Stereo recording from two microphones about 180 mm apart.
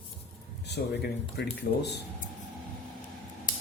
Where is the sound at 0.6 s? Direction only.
65° left (ahead or behind).